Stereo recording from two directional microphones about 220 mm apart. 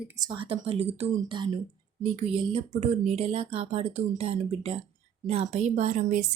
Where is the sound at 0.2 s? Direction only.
20° right (ahead or behind).